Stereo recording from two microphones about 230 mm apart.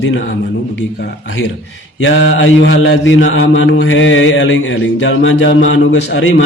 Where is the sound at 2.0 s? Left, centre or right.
Left.